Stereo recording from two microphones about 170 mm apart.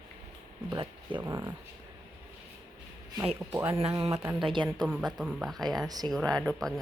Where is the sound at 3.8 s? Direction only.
30° right (ahead or behind).